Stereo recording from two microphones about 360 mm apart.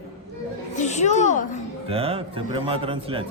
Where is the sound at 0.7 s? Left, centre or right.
Centre.